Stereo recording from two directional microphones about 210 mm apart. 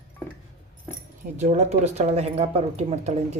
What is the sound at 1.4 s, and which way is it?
Speech, 35° right (ahead or behind).